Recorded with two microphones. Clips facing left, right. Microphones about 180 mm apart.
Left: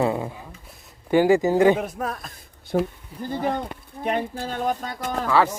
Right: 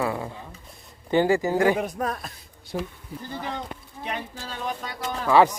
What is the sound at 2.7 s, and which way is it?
Speech, 60° left (ahead or behind).